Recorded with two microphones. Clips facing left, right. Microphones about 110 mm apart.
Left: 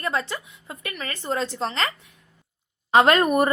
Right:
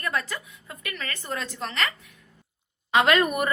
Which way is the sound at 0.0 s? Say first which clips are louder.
Left 3 dB; 25° left (ahead or behind).